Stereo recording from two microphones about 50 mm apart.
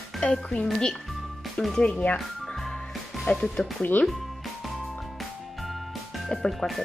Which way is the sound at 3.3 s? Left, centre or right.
Left.